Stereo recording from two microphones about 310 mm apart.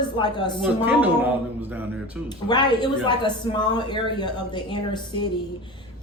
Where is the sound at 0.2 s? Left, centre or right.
Centre.